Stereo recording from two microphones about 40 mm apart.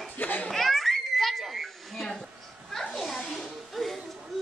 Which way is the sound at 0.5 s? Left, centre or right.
Centre.